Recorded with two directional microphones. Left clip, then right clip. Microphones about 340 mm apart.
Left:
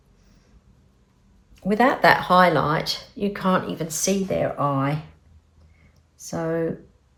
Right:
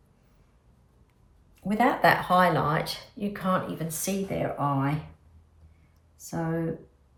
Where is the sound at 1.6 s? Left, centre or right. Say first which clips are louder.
Left 5 dB; left.